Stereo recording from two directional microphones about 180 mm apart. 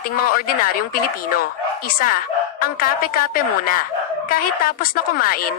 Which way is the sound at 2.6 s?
50° left (ahead or behind).